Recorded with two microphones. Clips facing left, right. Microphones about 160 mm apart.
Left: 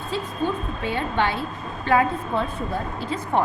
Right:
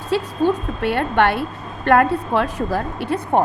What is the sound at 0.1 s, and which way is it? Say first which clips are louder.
A woman's voice: right 8 dB; 70° right (ahead or behind).